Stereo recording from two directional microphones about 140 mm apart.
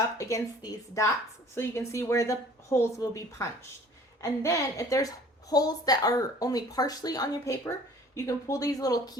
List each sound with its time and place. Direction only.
0.2 s a woman's voice: 25° left (ahead or behind)